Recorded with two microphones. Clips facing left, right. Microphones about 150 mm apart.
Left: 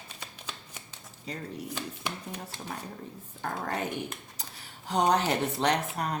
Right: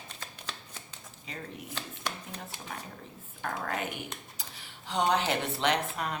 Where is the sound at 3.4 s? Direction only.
35° left (ahead or behind).